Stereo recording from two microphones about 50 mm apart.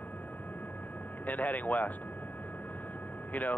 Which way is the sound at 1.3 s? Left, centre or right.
Left.